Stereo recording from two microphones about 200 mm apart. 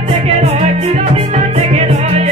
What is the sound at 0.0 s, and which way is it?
Music, 30° right (ahead or behind).